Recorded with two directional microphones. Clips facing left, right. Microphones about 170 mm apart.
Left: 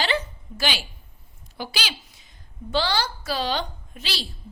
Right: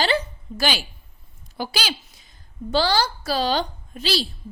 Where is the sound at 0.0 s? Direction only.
40° right (ahead or behind).